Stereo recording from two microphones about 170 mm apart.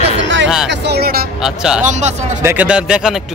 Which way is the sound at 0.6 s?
75° right (ahead or behind).